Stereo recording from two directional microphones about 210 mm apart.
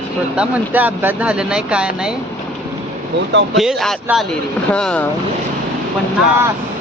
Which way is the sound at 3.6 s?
Centre (ahead or behind).